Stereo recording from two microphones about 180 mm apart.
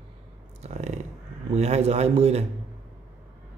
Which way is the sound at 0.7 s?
40° right (ahead or behind).